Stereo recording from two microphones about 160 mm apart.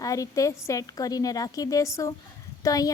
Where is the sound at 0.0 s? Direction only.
20° left (ahead or behind).